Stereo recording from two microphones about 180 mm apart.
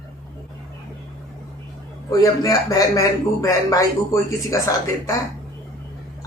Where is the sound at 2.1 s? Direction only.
20° left (ahead or behind).